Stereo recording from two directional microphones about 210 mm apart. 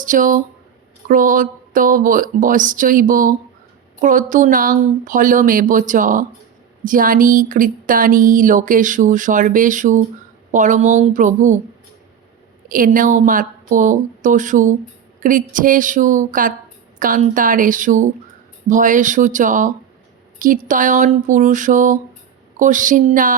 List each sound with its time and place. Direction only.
0.0 s speech: 40° right (ahead or behind)
12.6 s speech: 40° right (ahead or behind)